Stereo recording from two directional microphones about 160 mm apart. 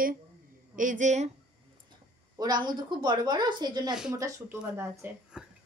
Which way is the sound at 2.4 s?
25° right (ahead or behind).